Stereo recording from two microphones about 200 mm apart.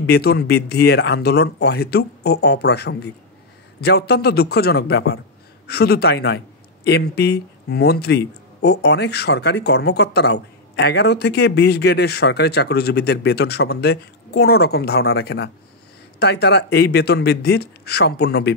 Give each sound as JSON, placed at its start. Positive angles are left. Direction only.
{"t": 0.0, "sound": "speech", "side_deg": 55}